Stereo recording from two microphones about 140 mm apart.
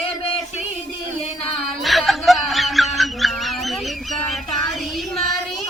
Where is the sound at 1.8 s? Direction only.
Centre (ahead or behind).